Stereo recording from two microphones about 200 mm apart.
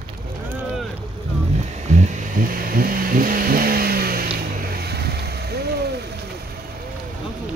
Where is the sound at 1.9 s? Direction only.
35° right (ahead or behind); by 5.9 s 55° right (ahead or behind).